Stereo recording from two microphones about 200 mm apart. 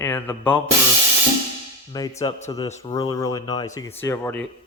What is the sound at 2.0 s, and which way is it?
Speech, 20° left (ahead or behind).